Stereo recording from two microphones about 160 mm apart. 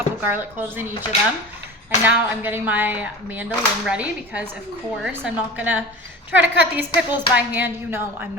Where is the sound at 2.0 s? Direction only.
10° right (ahead or behind).